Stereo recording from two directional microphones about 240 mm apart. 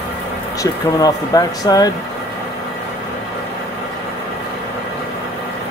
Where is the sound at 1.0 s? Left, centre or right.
Centre.